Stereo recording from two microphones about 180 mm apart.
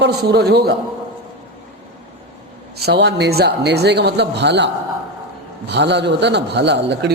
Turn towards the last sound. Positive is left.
turn(degrees=-70)  # may be behind; listen again after turning